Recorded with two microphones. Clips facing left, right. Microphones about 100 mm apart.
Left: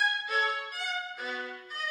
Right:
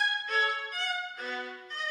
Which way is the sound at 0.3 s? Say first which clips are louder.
Even; 5° left (ahead or behind).